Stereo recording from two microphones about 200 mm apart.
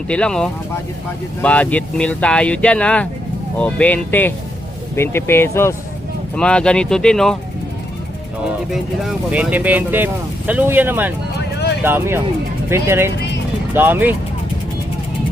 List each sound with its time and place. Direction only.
0.1 s speech: 5° left (ahead or behind)
8.4 s speech: centre (ahead or behind)